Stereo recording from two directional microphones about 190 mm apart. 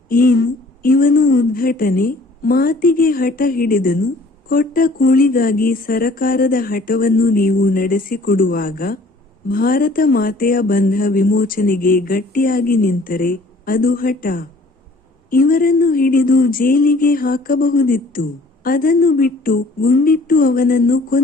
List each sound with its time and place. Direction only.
0.1 s a woman's voice: 50° left (ahead or behind)